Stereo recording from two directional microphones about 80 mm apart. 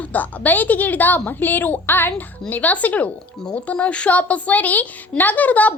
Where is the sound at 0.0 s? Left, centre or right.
Centre.